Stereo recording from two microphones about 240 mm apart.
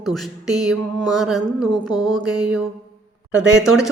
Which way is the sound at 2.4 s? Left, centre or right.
Centre.